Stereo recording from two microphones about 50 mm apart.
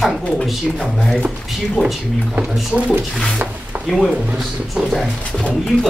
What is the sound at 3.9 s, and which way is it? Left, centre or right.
Speech, centre.